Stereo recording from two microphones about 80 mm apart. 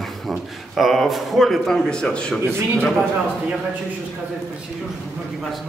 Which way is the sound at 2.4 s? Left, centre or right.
Right.